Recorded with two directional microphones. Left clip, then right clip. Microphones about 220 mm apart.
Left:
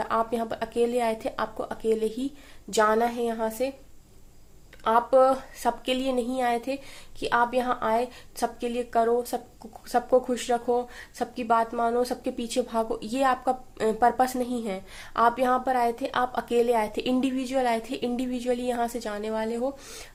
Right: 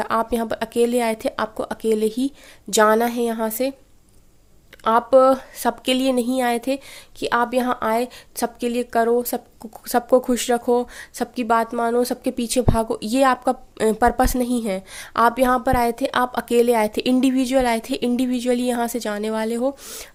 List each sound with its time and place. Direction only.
0.0 s a woman's voice: 45° right (ahead or behind)
4.8 s a woman's voice: 50° right (ahead or behind)